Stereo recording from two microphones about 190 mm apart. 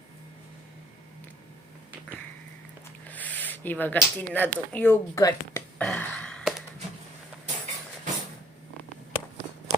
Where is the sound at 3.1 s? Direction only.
10° left (ahead or behind).